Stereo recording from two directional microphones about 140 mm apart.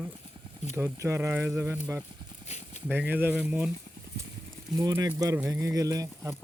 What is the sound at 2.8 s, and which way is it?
Speech, 10° right (ahead or behind).